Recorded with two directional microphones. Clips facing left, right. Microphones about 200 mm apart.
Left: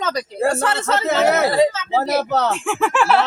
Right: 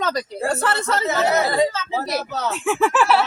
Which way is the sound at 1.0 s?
65° left (ahead or behind).